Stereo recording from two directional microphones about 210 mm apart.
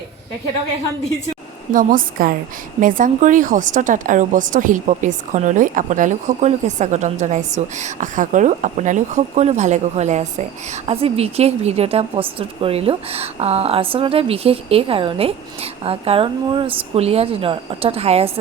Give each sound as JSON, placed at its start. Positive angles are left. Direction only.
{"t": 1.7, "sound": "a woman's voice", "side_deg": -40}